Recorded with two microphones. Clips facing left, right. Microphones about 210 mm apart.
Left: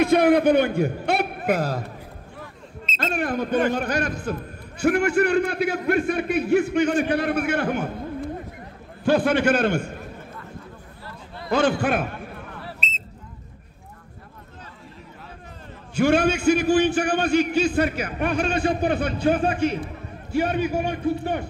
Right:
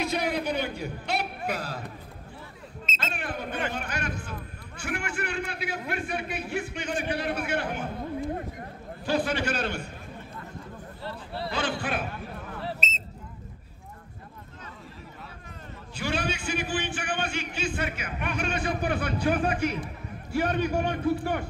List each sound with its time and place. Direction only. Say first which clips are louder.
0.0 s a man's voice: left 12 dB; 55° left (ahead or behind)
2.9 s a man's voice: left 10 dB; 40° left (ahead or behind)
9.0 s a man's voice: left 8 dB; 55° left (ahead or behind)
11.5 s a man's voice: left 11 dB; 45° left (ahead or behind)
15.9 s a man's voice: left 11 dB; 50° left (ahead or behind); by 19.8 s 30° left (ahead or behind)
20.5 s a man's voice: left 3 dB; 5° left (ahead or behind)
21.2 s speech: left 3 dB; 25° left (ahead or behind)